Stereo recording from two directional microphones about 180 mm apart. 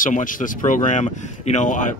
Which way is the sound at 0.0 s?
50° left (ahead or behind).